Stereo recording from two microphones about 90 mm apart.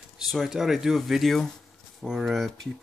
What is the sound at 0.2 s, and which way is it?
Speech, centre (ahead or behind).